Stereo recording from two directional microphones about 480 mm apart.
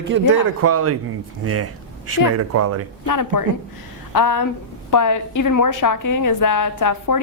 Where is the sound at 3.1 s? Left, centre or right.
Left.